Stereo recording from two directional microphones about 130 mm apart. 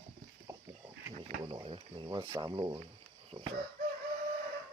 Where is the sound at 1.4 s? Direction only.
40° right (ahead or behind).